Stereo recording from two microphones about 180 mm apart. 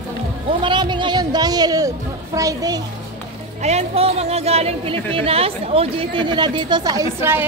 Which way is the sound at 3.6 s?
40° right (ahead or behind).